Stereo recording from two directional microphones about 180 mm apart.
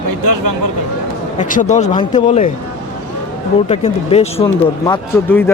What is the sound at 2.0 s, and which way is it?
Speech, 30° left (ahead or behind).